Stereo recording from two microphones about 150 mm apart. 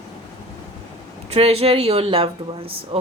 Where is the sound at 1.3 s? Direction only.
40° right (ahead or behind).